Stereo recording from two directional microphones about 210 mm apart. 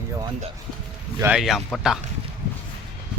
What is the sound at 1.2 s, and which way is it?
Speech, 5° right (ahead or behind).